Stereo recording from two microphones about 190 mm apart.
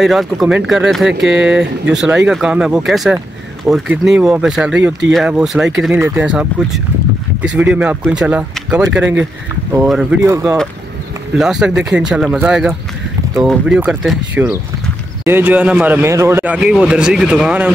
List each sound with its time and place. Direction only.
0.0 s a man's voice: centre (ahead or behind)
10.2 s a man's voice: 15° right (ahead or behind)
11.3 s a man's voice: 5° right (ahead or behind)